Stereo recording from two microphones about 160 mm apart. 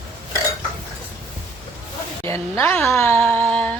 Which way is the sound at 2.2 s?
15° left (ahead or behind).